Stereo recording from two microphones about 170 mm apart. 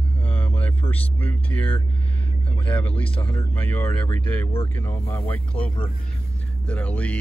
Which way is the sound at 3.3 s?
10° left (ahead or behind).